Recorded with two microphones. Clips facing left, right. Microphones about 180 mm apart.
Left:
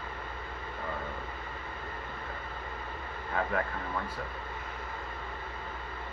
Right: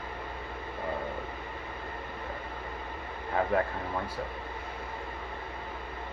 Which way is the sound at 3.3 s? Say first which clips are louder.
Right 4 dB; 30° right (ahead or behind).